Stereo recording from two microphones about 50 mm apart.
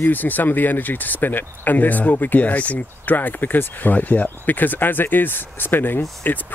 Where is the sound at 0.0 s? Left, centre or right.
Left.